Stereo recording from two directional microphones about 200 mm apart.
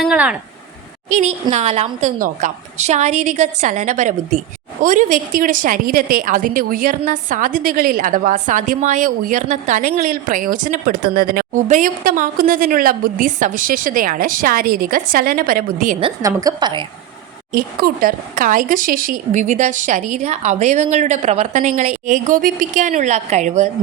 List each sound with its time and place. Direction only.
0.0 s a sound: 5° right (ahead or behind)
1.1 s a woman's voice: 35° right (ahead or behind)
16.0 s a woman's voice: 20° right (ahead or behind)
17.5 s speech: 45° right (ahead or behind)